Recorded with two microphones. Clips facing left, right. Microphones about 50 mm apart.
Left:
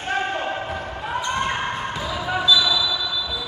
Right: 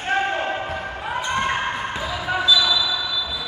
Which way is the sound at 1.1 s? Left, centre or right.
Right.